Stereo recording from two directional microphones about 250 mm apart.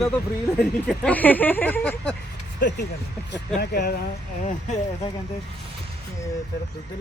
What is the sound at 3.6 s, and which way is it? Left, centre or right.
Speech, left.